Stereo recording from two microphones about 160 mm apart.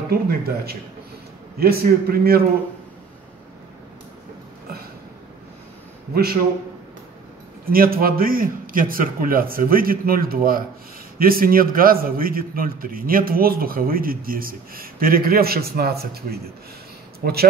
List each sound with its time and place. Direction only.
0.1 s a man's voice: 75° right (ahead or behind)
7.6 s a man's voice: 65° right (ahead or behind)